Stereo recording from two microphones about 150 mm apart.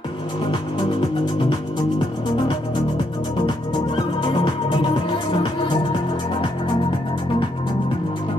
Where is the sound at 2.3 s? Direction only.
35° left (ahead or behind).